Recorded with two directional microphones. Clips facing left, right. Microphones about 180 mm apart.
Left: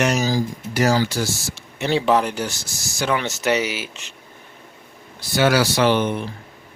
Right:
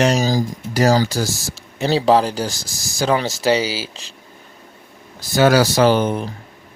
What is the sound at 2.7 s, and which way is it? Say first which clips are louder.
Speech: right 1 dB; 90° right.